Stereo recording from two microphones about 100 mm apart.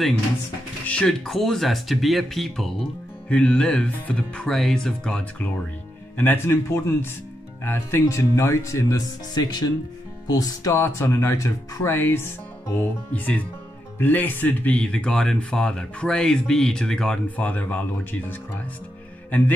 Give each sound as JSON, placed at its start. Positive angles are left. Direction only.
{"t": 0.8, "sound": "speech", "side_deg": 10}
{"t": 6.1, "sound": "speech", "side_deg": 20}
{"t": 10.7, "sound": "speech", "side_deg": 25}
{"t": 19.3, "sound": "speech", "side_deg": 15}